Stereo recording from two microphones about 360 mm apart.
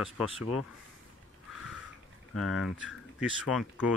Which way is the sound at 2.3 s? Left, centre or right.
Left.